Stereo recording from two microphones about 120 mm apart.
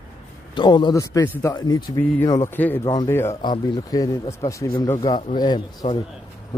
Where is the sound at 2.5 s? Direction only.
15° left (ahead or behind).